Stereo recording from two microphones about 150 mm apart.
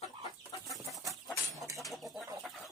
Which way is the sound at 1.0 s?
Centre (ahead or behind).